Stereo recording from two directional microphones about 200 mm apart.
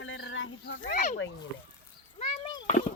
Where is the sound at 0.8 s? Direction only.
35° left (ahead or behind).